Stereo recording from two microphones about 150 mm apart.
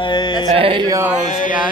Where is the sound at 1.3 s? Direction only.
60° left (ahead or behind).